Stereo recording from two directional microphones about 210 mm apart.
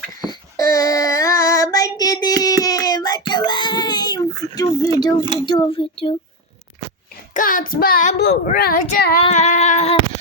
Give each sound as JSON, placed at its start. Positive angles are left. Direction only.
{"t": 0.3, "sound": "child singing", "side_deg": 15}
{"t": 5.5, "sound": "speech", "side_deg": 25}
{"t": 7.3, "sound": "a child's voice", "side_deg": 40}
{"t": 9.2, "sound": "child singing", "side_deg": 35}